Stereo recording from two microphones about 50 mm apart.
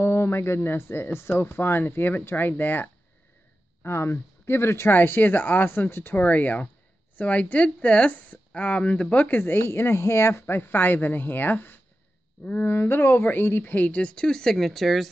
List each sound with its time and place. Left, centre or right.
0.0 s speech: left
3.8 s speech: left
4.9 s speech: left
5.7 s speech: left
6.1 s speech: left
9.4 s speech: left
10.4 s speech: left; by 15.0 s centre